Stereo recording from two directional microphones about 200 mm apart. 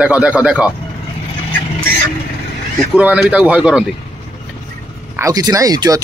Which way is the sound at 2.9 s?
5° right (ahead or behind).